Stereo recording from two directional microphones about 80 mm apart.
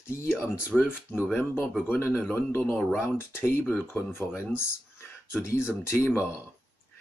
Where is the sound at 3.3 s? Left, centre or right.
Left.